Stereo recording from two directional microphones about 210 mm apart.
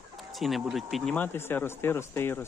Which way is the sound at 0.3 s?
Centre (ahead or behind).